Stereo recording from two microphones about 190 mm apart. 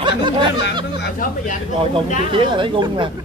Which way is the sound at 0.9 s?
45° left (ahead or behind).